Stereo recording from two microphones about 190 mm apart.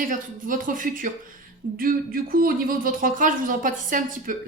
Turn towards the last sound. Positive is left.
turn(degrees=-45)  # may be behind; listen again after turning